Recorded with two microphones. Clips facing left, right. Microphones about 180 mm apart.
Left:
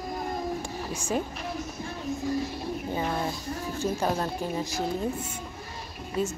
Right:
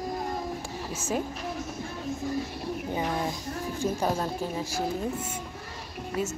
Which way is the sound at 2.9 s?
15° right (ahead or behind).